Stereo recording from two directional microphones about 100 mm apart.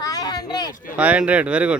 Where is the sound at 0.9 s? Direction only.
10° right (ahead or behind).